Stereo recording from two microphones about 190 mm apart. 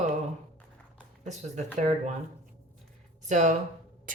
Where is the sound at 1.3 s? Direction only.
40° right (ahead or behind).